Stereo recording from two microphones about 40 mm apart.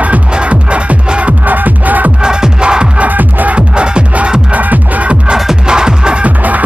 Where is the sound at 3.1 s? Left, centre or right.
Right.